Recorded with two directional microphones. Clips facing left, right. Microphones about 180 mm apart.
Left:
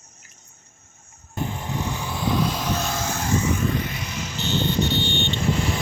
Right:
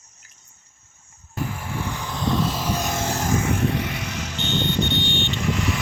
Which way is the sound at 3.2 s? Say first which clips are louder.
Even; 50° right (ahead or behind).